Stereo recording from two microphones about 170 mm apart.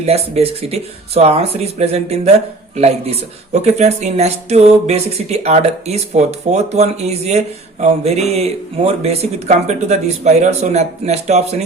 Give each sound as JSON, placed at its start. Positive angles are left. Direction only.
{"t": 0.3, "sound": "speech", "side_deg": -35}